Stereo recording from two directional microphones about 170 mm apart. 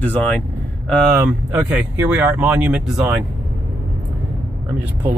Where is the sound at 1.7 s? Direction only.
10° right (ahead or behind).